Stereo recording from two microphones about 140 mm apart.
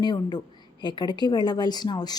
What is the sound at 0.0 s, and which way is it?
Speech, 30° left (ahead or behind).